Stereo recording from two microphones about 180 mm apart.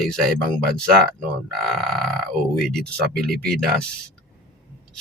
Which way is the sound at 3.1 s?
60° right (ahead or behind).